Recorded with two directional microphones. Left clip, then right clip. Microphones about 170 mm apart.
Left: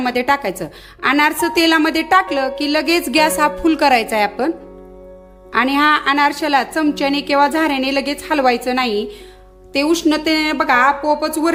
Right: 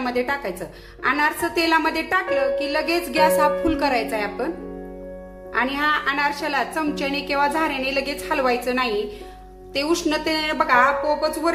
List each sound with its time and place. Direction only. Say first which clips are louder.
0.0 s a woman's voice: left 7 dB; 60° left (ahead or behind)
5.5 s a woman's voice: left 7 dB; 60° left (ahead or behind)